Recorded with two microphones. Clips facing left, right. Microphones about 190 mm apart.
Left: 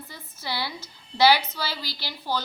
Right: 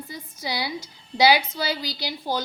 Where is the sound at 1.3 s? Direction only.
15° right (ahead or behind).